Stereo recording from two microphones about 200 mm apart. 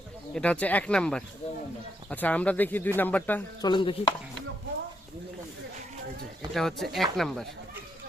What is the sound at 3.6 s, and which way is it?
Speech, 25° left (ahead or behind).